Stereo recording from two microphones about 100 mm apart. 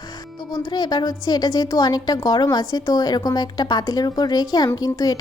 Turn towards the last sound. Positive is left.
turn(degrees=40)  # may be behind; listen again after turning